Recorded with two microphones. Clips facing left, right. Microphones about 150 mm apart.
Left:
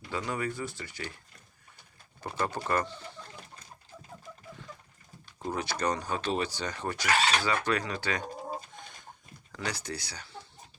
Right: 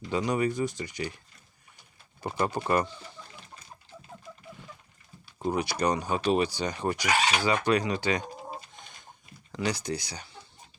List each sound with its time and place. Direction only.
0.1 s speech: 20° right (ahead or behind)
2.2 s speech: 15° right (ahead or behind)
5.4 s speech: 15° right (ahead or behind)
9.5 s speech: 15° right (ahead or behind)